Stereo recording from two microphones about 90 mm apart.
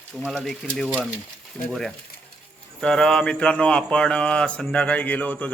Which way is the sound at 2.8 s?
5° left (ahead or behind).